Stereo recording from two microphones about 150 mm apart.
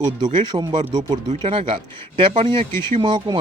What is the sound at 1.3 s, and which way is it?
Speech, 40° right (ahead or behind).